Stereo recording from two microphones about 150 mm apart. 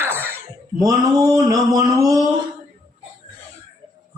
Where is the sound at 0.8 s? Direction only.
20° right (ahead or behind).